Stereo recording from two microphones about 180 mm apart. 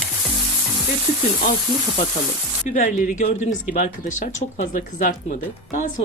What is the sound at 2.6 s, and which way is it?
Speech, 45° left (ahead or behind).